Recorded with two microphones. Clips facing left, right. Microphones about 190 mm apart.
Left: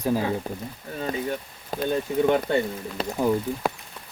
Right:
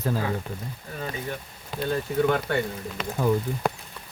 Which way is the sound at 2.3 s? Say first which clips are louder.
Left 3 dB; 20° left (ahead or behind).